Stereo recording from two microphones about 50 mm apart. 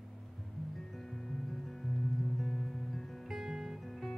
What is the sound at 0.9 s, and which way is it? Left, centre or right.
Music, centre.